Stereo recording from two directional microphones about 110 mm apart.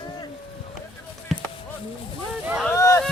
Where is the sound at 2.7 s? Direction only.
25° left (ahead or behind).